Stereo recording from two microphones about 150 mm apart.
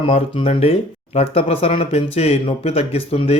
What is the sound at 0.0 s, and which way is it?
Speech, 40° left (ahead or behind).